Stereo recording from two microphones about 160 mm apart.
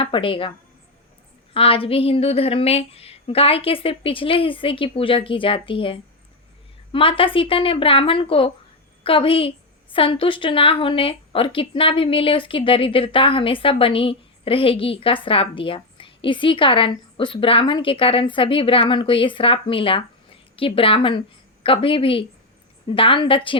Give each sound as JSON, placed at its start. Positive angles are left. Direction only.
{"t": 0.0, "sound": "a woman's voice", "side_deg": 35}
{"t": 1.5, "sound": "a woman's voice", "side_deg": 35}